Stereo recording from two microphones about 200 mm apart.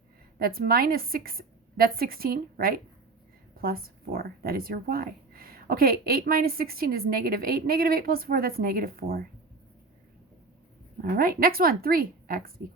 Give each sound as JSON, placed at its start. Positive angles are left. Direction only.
{"t": 0.3, "sound": "speech", "side_deg": -45}
{"t": 11.2, "sound": "speech", "side_deg": -45}